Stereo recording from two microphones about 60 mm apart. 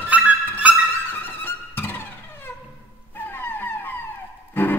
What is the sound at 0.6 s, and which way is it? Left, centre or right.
Music, right.